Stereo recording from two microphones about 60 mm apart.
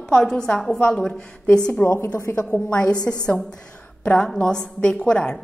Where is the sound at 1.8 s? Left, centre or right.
Left.